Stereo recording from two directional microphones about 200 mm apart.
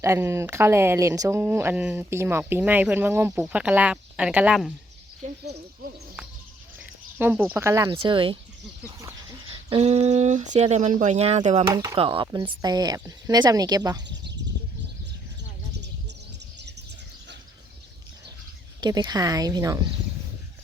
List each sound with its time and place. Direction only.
0.0 s speech: 15° right (ahead or behind)
5.8 s speech: 50° right (ahead or behind)
6.7 s speech: 10° right (ahead or behind)
7.9 s speech: 25° right (ahead or behind)
9.5 s speech: 30° right (ahead or behind)
11.6 s speech: 15° right (ahead or behind)
14.1 s bird: 60° right (ahead or behind)
16.6 s bird: 60° right (ahead or behind)
18.8 s speech: 20° right (ahead or behind)